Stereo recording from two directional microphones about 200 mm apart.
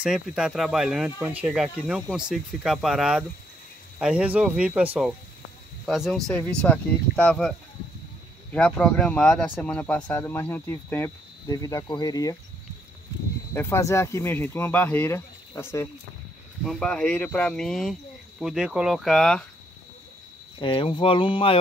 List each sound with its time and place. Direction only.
0.0 s speech: 5° right (ahead or behind); by 12.4 s 20° left (ahead or behind)
13.5 s speech: 15° left (ahead or behind)
16.6 s speech: 5° left (ahead or behind)
20.5 s speech: 25° left (ahead or behind)